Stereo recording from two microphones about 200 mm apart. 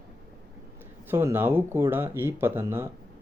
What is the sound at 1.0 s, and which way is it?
Speech, 10° right (ahead or behind).